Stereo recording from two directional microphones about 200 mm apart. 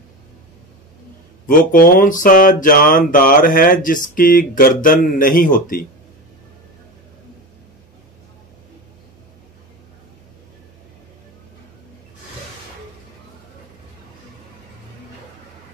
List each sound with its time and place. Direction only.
1.5 s mantra: 45° left (ahead or behind)